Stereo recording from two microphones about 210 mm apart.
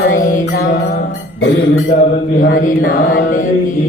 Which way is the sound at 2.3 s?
40° left (ahead or behind).